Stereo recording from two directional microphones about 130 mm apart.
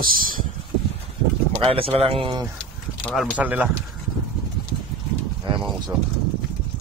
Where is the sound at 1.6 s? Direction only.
45° right (ahead or behind).